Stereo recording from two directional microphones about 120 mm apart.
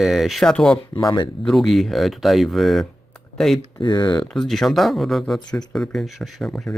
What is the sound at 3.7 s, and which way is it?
Speech, 40° left (ahead or behind).